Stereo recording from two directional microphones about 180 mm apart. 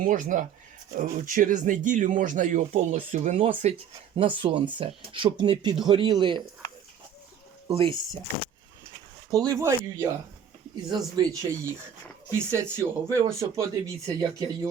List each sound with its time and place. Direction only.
0.0 s speech: 45° right (ahead or behind); by 6.4 s 25° right (ahead or behind)
7.7 s speech: 30° right (ahead or behind)
9.3 s speech: 20° right (ahead or behind)